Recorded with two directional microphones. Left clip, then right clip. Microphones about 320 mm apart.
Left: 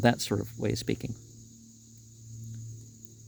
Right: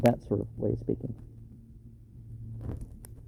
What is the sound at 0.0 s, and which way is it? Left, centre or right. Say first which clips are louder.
Speech: even; left.